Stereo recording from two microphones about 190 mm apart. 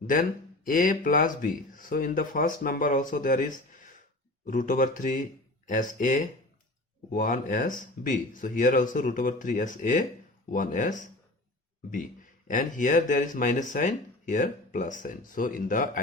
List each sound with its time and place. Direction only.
0.1 s speech: 45° left (ahead or behind)
12.5 s speech: 45° left (ahead or behind)